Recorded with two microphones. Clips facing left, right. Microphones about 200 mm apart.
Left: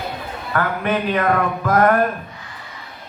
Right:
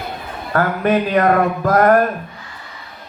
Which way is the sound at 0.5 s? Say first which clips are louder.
Right 5 dB; 40° right (ahead or behind).